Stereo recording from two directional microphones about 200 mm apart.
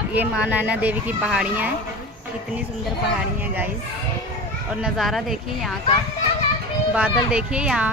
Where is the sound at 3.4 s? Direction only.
10° right (ahead or behind).